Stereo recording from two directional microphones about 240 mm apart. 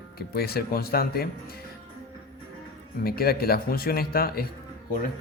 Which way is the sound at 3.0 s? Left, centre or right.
Left.